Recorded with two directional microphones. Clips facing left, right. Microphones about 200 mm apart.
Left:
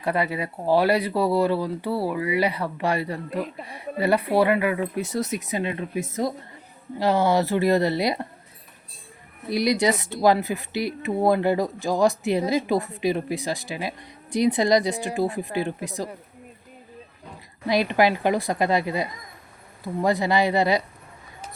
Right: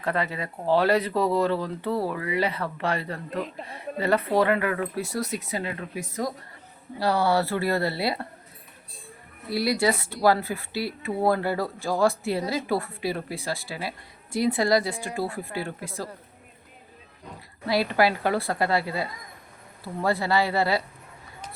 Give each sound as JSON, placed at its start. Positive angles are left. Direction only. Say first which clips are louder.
{"t": 0.0, "sound": "speech", "louder": "left 3 dB", "side_deg": 10}
{"t": 9.5, "sound": "speech", "louder": "left 2 dB", "side_deg": 20}
{"t": 17.7, "sound": "speech", "louder": "left 2 dB", "side_deg": 20}